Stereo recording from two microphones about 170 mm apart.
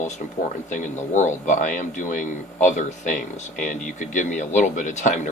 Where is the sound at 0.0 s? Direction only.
50° left (ahead or behind).